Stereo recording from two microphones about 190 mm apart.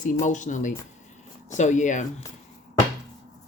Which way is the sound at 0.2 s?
40° left (ahead or behind).